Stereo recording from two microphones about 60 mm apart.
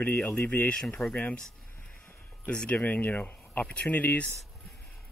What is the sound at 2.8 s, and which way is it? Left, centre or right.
Speech, left.